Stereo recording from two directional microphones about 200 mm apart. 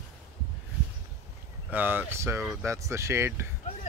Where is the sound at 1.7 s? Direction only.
10° right (ahead or behind).